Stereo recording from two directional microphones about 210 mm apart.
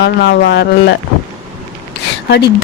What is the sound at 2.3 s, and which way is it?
Speech, 50° left (ahead or behind).